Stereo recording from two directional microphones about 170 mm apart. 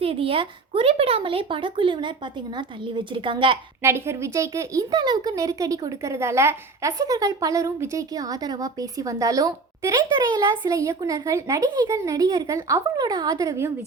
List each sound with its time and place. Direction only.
0.0 s a woman's voice: 35° right (ahead or behind)
3.8 s speech: 15° right (ahead or behind)